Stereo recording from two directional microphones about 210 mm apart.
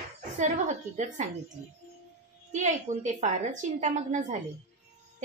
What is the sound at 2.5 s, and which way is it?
A woman's voice, 35° right (ahead or behind).